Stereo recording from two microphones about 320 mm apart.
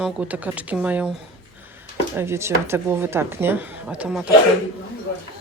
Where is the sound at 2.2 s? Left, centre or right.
Centre.